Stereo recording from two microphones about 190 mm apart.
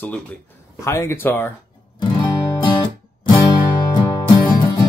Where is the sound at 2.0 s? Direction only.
25° left (ahead or behind).